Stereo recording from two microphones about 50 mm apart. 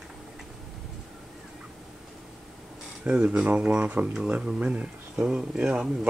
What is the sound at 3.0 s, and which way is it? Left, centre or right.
Speech, right.